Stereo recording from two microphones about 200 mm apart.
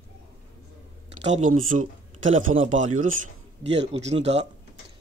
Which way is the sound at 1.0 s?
35° right (ahead or behind).